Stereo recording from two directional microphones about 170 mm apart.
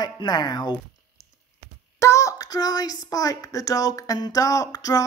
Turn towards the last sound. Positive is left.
turn(degrees=20)  # may be behind; listen again after turning